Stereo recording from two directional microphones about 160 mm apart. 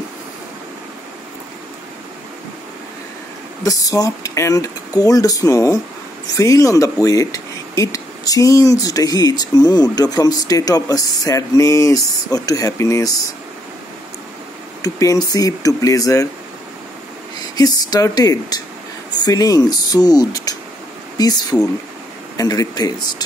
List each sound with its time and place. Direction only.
3.6 s speech: 20° left (ahead or behind)
14.8 s speech: 20° left (ahead or behind)
17.6 s speech: 25° left (ahead or behind)